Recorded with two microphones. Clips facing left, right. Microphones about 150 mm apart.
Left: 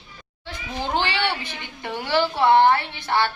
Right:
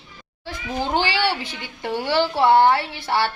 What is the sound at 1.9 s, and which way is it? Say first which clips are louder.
Speech: right 2 dB; 40° right (ahead or behind).